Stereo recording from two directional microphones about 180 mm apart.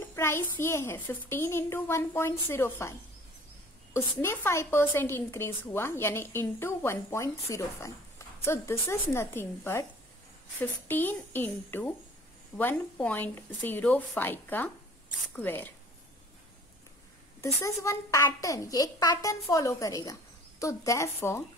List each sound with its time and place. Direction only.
0.1 s a woman's voice: 15° left (ahead or behind)
17.6 s a woman's voice: 15° left (ahead or behind)